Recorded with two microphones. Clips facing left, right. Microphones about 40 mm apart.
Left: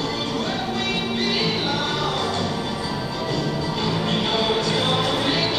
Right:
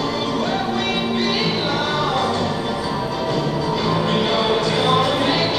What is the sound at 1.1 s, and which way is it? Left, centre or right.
Music, centre.